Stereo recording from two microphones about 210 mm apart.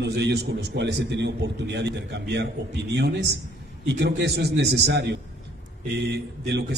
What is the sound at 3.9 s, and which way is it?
A man's voice, 55° right (ahead or behind).